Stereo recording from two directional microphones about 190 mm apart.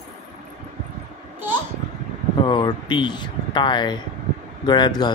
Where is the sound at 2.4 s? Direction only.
25° left (ahead or behind).